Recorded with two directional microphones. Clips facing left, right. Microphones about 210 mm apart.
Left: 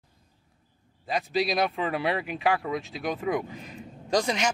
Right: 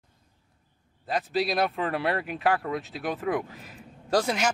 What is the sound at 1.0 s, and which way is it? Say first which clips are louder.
Speech: even; centre (ahead or behind).